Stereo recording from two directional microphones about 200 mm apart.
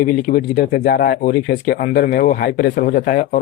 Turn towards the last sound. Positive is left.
turn(degrees=40)  # may be behind; listen again after turning